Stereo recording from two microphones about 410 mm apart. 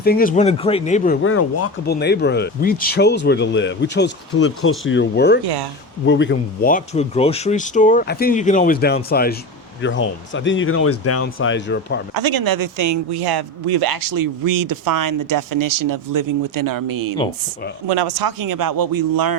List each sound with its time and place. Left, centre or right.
0.0 s speech: left
1.9 s speech: left
12.1 s speech: right
13.1 s speech: right
17.8 s speech: right